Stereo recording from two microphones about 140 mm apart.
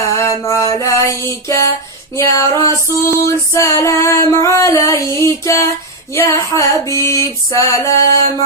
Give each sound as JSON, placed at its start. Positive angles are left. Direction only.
{"t": 0.2, "sound": "mantra", "side_deg": 20}
{"t": 0.8, "sound": "music", "side_deg": 20}